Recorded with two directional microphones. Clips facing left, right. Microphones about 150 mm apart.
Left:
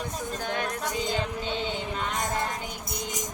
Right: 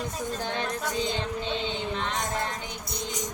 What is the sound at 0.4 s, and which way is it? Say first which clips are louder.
Speech: left 3 dB; 30° right (ahead or behind).